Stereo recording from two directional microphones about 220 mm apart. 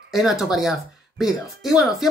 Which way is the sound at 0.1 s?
Centre (ahead or behind).